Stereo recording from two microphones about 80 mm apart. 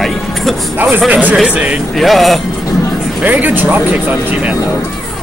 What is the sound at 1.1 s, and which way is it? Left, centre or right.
Speech, centre.